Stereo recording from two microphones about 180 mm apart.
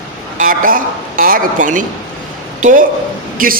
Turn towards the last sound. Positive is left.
turn(degrees=-50)  # may be behind; listen again after turning